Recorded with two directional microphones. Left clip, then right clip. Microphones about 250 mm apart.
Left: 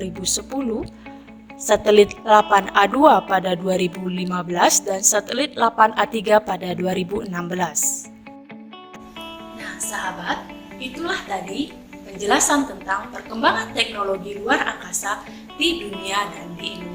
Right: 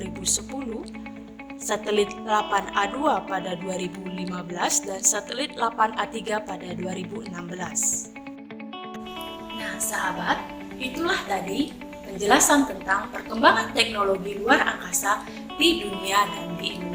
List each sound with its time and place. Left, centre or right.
0.0 s speech: left
1.6 s speech: left
9.6 s music: centre
10.8 s a woman's voice: centre